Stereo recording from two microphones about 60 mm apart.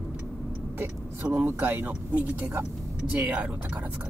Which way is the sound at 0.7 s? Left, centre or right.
Right.